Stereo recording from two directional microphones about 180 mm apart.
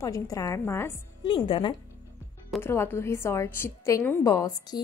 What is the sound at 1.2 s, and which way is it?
Speech, 30° left (ahead or behind).